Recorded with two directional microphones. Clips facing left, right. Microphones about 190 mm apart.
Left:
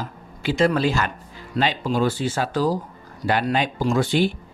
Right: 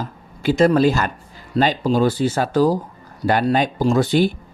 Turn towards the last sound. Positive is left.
turn(degrees=-40)  # may be behind; listen again after turning